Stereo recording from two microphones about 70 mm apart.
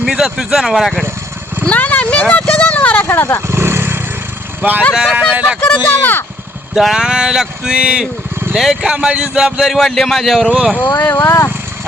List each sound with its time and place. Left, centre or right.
0.0 s speech: centre
1.6 s a sound: left
3.4 s vehicle: right
4.6 s speech: right
5.6 s speech: left
6.7 s speech: centre
9.7 s a man's voice: centre
10.4 s speech: centre
10.8 s speech: left